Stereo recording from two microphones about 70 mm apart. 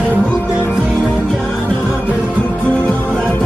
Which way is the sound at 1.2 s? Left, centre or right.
Centre.